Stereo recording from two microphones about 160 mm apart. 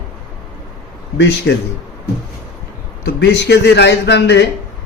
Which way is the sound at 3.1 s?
90° left.